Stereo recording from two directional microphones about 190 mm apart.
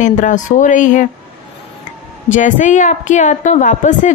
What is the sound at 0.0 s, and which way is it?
Speech, 40° left (ahead or behind).